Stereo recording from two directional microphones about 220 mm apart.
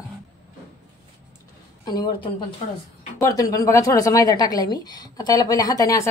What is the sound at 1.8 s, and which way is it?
A woman's voice, 20° left (ahead or behind).